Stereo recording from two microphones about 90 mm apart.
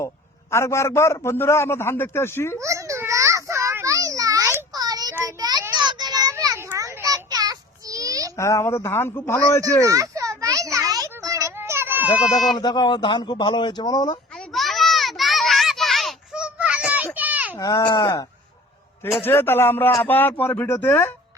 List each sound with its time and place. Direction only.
0.5 s a man's voice: 30° left (ahead or behind)
2.6 s children playing: 35° right (ahead or behind)
5.2 s a sound: 45° right (ahead or behind)
6.3 s a sound: 35° right (ahead or behind)
8.4 s a man's voice: 30° left (ahead or behind)
9.8 s a sound: 35° right (ahead or behind)
12.2 s speech: centre (ahead or behind)
12.5 s speech: 55° left (ahead or behind)
14.3 s children playing: centre (ahead or behind)
16.3 s a sound: 10° right (ahead or behind)
17.2 s children playing: 15° right (ahead or behind)
17.6 s speech: 40° left (ahead or behind)
19.2 s a man's voice: 25° left (ahead or behind)